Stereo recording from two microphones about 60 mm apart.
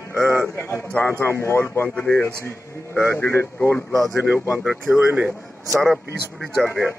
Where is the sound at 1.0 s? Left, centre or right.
Left.